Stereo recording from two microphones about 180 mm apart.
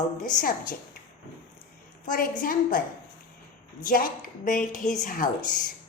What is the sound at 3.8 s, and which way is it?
A woman's voice, 50° left (ahead or behind).